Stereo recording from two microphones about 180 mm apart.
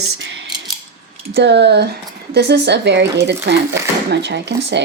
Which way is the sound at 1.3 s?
70° right (ahead or behind).